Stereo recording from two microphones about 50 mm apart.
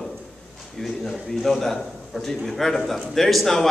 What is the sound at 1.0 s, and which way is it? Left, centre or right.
A man's voice, centre.